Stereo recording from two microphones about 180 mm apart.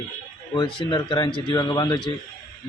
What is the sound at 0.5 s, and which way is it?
Music, 30° left (ahead or behind).